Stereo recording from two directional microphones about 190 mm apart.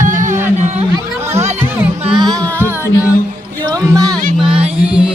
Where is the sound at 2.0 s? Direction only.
25° right (ahead or behind).